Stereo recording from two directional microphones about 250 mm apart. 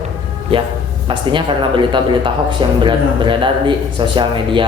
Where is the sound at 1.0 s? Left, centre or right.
Centre.